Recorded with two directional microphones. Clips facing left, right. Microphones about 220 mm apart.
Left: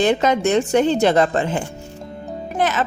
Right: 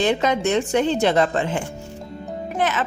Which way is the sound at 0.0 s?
45° left (ahead or behind).